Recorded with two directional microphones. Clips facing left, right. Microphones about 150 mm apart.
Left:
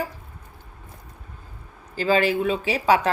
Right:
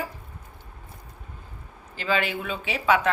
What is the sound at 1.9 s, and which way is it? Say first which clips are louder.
Speech: left 6 dB; 35° left (ahead or behind).